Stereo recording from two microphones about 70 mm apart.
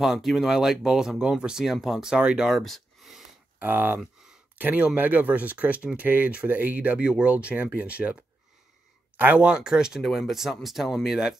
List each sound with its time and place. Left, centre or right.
0.0 s speech: centre
3.5 s speech: right
4.0 s a sound: centre
4.6 s speech: right
9.5 s speech: centre